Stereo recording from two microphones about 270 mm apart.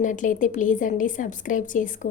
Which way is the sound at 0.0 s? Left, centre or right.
Left.